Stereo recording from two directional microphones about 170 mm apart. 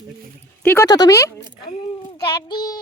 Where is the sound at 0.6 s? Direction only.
20° left (ahead or behind).